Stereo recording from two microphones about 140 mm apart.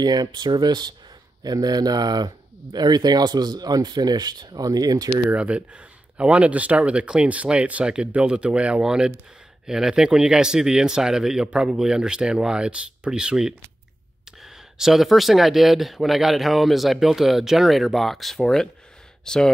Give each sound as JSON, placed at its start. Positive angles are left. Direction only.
{"t": 0.0, "sound": "speech", "side_deg": -30}
{"t": 5.1, "sound": "speech", "side_deg": -10}